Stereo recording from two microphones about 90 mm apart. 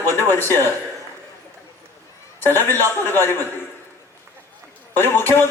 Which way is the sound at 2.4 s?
25° left (ahead or behind).